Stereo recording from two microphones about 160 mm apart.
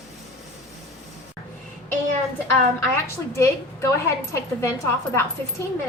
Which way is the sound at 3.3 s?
20° left (ahead or behind).